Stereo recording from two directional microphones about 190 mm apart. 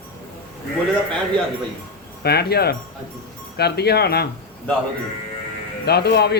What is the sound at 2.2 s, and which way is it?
Speech, 55° left (ahead or behind).